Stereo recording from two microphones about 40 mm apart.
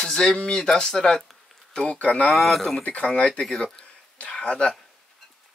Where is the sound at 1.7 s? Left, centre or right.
Left.